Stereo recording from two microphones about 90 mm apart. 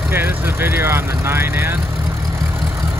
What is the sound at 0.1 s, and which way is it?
Speech, 25° right (ahead or behind).